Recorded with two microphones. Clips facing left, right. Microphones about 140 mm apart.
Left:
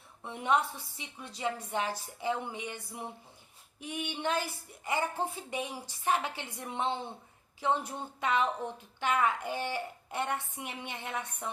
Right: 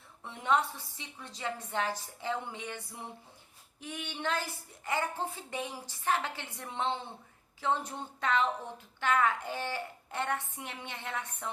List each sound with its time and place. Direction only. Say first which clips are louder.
0.2 s speech: even; 15° left (ahead or behind)